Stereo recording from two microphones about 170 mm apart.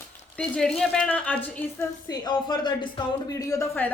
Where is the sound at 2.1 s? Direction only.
25° left (ahead or behind).